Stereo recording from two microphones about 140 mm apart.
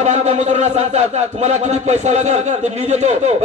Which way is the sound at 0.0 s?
55° right (ahead or behind).